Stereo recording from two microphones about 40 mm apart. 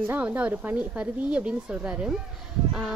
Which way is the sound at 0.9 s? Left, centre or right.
Right.